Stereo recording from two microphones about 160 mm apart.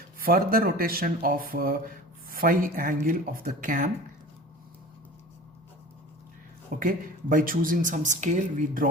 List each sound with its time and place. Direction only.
0.2 s speech: 65° right (ahead or behind)
6.7 s speech: 60° right (ahead or behind)